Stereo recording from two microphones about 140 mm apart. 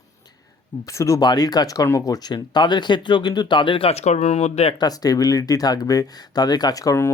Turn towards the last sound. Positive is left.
turn(degrees=20)  # may be behind; listen again after turning